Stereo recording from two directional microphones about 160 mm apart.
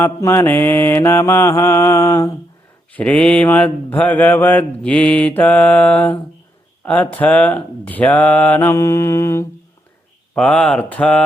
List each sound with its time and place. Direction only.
0.0 s mantra: 15° left (ahead or behind)
10.3 s speech: 5° left (ahead or behind)